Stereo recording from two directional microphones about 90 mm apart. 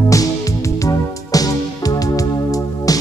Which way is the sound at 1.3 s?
45° left (ahead or behind).